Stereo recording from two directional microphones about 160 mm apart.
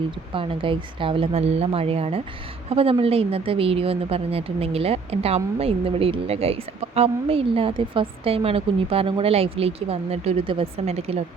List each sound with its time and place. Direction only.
0.3 s a woman's voice: 35° right (ahead or behind)